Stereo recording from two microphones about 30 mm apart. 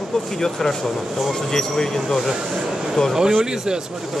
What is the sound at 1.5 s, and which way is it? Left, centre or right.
Speech, centre.